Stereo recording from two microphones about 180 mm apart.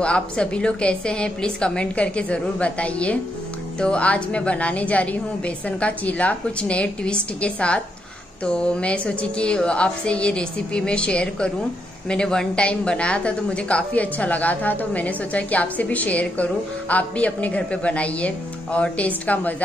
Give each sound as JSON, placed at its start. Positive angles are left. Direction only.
{"t": 0.0, "sound": "a woman's voice", "side_deg": 5}